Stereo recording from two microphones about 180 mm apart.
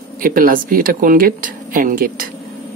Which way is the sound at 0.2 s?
50° right (ahead or behind).